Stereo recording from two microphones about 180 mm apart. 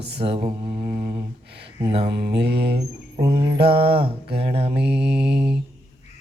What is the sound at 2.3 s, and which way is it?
Mantra, 65° right (ahead or behind).